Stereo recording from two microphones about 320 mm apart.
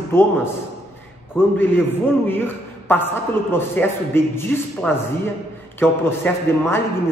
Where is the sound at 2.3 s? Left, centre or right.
Centre.